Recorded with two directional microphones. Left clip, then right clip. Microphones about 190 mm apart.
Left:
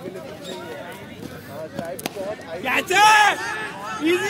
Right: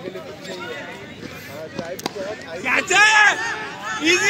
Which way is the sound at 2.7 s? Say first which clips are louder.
Right 2 dB; 50° left (ahead or behind).